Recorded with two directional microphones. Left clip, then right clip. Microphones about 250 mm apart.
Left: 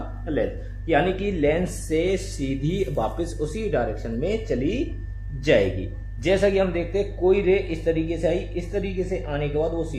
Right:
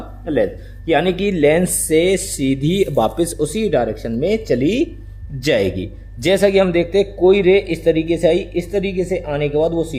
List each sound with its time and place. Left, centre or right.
0.3 s a man's voice: right